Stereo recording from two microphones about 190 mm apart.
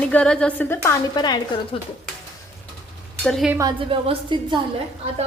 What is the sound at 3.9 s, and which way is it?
Speech, 25° right (ahead or behind).